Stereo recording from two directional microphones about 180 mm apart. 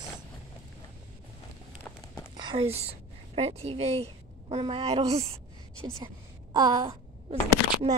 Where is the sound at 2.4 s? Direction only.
30° right (ahead or behind).